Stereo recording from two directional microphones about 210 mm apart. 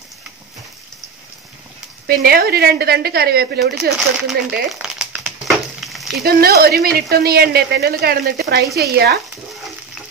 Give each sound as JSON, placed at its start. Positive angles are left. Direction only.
{"t": 2.0, "sound": "speech", "side_deg": -45}
{"t": 4.3, "sound": "a sound", "side_deg": 0}
{"t": 5.8, "sound": "frying", "side_deg": 0}
{"t": 6.2, "sound": "speech", "side_deg": -45}